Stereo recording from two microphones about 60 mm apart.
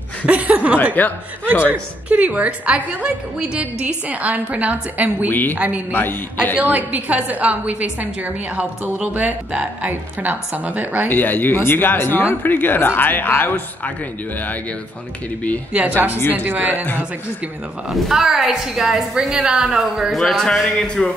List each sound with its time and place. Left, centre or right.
0.3 s chuckle: right
0.9 s speech: left
1.5 s a woman's voice: right
5.3 s speech: left
6.6 s a woman's voice: right
11.1 s speech: left
16.3 s a woman's voice: right
17.9 s a woman's voice: centre